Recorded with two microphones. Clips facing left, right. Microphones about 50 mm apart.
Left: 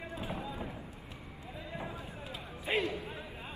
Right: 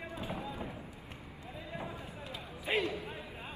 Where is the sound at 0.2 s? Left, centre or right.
Centre.